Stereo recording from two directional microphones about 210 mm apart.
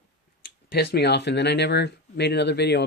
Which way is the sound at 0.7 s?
50° left (ahead or behind).